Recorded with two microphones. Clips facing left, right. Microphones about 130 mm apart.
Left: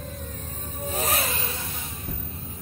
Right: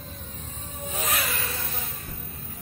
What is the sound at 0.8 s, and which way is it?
Music, 35° left (ahead or behind).